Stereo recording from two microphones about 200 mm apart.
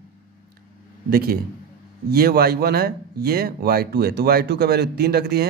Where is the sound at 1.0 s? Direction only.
50° right (ahead or behind).